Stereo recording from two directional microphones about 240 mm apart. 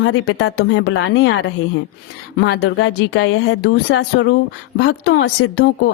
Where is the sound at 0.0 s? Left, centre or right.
Left.